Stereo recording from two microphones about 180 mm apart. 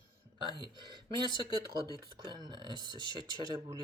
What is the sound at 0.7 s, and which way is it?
Speech, 25° right (ahead or behind).